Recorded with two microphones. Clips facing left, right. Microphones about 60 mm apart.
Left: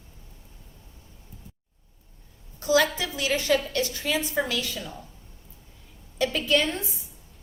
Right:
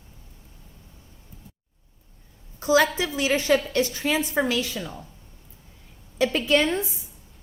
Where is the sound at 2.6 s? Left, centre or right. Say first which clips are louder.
Right 2 dB; right.